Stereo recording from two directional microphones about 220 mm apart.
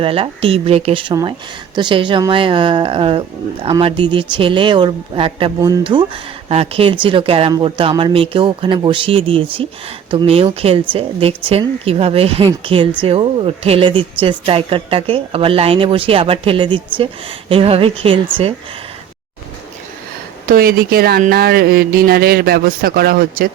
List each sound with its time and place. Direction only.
0.0 s speech: 25° right (ahead or behind)
20.5 s speech: 40° right (ahead or behind)